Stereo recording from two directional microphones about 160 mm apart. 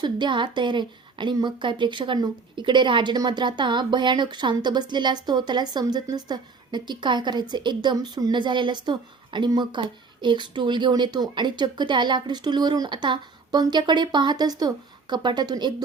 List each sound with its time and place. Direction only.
0.0 s a woman's voice: 30° right (ahead or behind)